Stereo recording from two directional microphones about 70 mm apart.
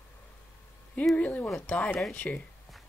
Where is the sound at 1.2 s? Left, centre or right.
Left.